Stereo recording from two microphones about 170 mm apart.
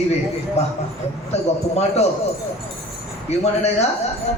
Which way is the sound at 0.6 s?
40° left (ahead or behind).